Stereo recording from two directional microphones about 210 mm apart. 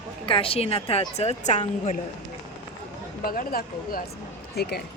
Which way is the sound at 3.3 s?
45° left (ahead or behind).